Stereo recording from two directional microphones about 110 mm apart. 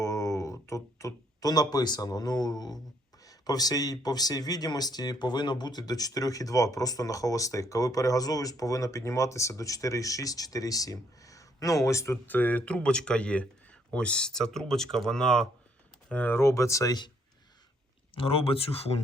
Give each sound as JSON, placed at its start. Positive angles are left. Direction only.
{"t": 0.0, "sound": "a sound", "side_deg": 30}
{"t": 3.2, "sound": "speech", "side_deg": 35}
{"t": 12.1, "sound": "speech", "side_deg": 15}
{"t": 18.1, "sound": "speech", "side_deg": 55}